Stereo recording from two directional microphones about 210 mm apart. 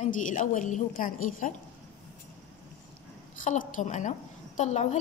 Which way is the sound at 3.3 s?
40° left (ahead or behind).